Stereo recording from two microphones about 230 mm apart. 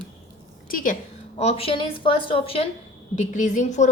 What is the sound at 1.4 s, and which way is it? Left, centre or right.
A woman's voice, left.